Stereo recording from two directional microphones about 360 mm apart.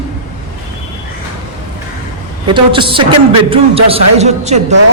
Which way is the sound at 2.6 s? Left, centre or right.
Centre.